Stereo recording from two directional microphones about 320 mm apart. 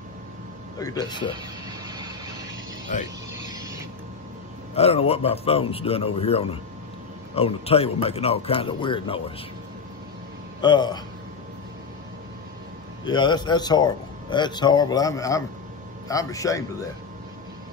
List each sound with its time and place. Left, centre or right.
0.7 s a man's voice: centre
1.3 s a sound: centre
4.7 s a man's voice: centre
10.6 s a man's voice: centre
13.0 s a man's voice: centre